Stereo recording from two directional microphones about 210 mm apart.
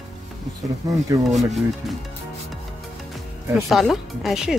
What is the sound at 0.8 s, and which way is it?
Speech, 15° right (ahead or behind).